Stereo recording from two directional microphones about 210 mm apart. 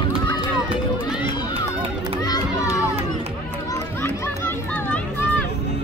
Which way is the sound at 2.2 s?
15° left (ahead or behind).